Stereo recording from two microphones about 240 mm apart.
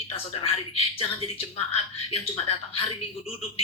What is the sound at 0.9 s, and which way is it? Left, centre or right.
A woman's voice, left.